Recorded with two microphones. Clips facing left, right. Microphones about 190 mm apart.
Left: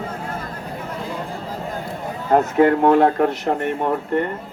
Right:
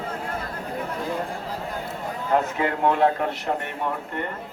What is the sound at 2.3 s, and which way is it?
Speech, 45° left (ahead or behind).